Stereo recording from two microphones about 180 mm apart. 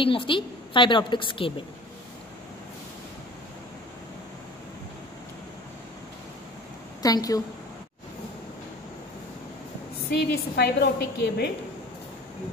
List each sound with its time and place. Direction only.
0.0 s a woman's voice: 30° left (ahead or behind)
7.0 s a woman's voice: 20° left (ahead or behind)
10.1 s a woman's voice: 65° left (ahead or behind)